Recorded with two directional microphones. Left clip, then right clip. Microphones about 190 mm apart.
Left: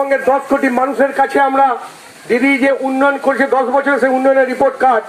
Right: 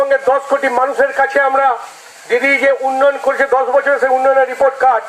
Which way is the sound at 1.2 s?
30° left (ahead or behind).